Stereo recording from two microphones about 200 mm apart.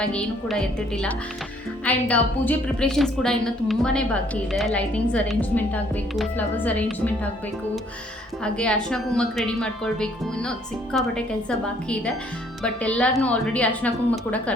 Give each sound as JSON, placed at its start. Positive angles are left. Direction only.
{"t": 0.0, "sound": "a woman's voice", "side_deg": 5}
{"t": 8.5, "sound": "a woman's voice", "side_deg": 5}